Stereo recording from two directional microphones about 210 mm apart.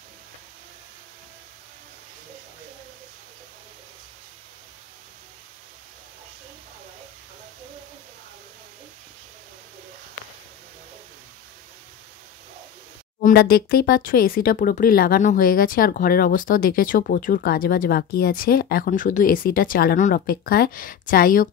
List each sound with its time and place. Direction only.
13.2 s speech: 45° left (ahead or behind)